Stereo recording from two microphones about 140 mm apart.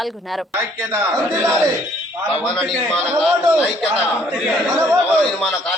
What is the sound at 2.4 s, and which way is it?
Speech, centre (ahead or behind).